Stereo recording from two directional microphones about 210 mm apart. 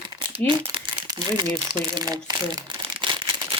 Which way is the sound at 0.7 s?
25° right (ahead or behind).